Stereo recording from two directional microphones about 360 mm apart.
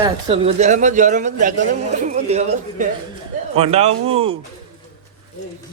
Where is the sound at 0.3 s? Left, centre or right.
Centre.